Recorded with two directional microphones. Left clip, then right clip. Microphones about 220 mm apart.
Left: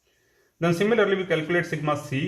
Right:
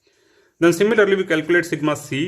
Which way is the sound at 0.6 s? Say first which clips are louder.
Right 6 dB; 55° right (ahead or behind).